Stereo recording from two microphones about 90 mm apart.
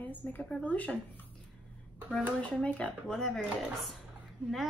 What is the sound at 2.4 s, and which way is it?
Speech, 15° left (ahead or behind).